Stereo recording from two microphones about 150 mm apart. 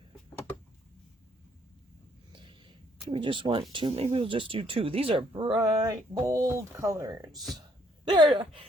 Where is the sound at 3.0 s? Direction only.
35° right (ahead or behind).